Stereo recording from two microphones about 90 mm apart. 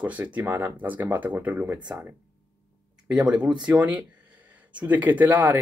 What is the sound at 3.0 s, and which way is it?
Speech, 10° right (ahead or behind).